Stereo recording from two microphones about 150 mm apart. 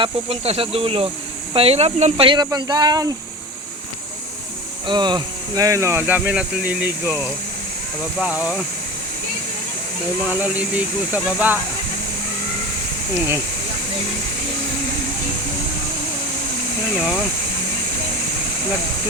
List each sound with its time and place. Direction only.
0.0 s speech: 40° right (ahead or behind); by 3.1 s 25° right (ahead or behind)
4.9 s speech: 30° right (ahead or behind); by 8.6 s 5° right (ahead or behind)
10.2 s speech: 10° right (ahead or behind)
13.1 s speech: 15° right (ahead or behind)